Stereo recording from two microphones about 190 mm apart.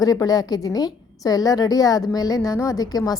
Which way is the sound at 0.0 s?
20° left (ahead or behind).